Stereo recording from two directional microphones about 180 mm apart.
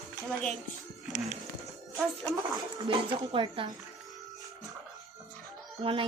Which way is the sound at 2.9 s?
30° right (ahead or behind).